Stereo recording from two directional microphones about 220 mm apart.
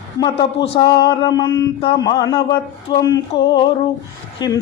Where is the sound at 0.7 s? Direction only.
20° left (ahead or behind).